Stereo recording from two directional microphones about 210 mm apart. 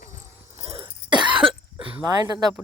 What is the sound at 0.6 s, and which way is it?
Throat clearing, 25° right (ahead or behind).